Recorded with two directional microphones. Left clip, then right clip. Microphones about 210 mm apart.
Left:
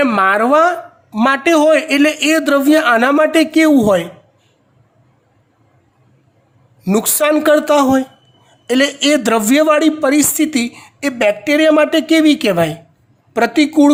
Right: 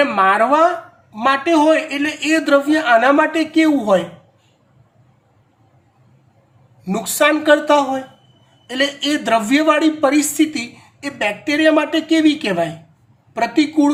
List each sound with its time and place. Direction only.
0.0 s a man's voice: 55° left (ahead or behind)
6.8 s a man's voice: 55° left (ahead or behind)